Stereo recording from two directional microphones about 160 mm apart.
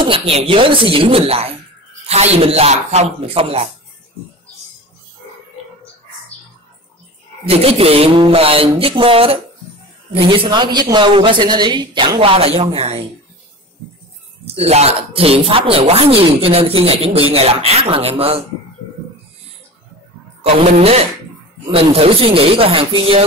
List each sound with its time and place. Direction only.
0.0 s speech: 35° right (ahead or behind)
7.4 s speech: 40° right (ahead or behind)
14.4 s speech: 40° right (ahead or behind)
20.4 s speech: 40° right (ahead or behind)